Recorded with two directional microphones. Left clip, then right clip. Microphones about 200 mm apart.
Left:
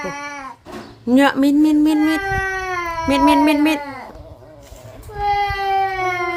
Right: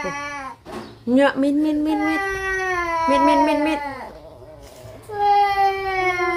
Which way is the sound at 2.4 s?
5° right (ahead or behind).